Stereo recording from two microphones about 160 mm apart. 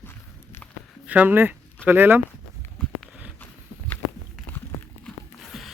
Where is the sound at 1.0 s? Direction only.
10° right (ahead or behind).